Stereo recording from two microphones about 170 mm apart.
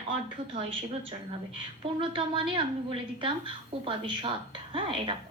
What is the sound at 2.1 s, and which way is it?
A woman's voice, 30° right (ahead or behind).